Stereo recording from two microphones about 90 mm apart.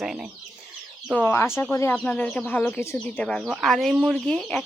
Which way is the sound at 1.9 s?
15° left (ahead or behind).